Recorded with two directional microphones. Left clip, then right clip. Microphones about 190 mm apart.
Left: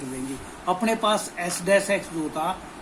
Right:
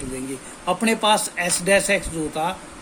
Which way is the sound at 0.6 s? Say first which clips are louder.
Right 3 dB; 45° right (ahead or behind).